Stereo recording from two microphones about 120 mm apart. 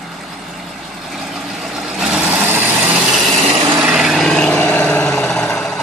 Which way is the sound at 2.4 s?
15° right (ahead or behind).